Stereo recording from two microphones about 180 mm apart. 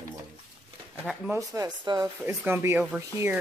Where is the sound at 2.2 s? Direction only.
15° right (ahead or behind).